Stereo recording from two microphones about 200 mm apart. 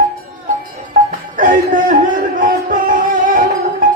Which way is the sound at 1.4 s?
40° right (ahead or behind).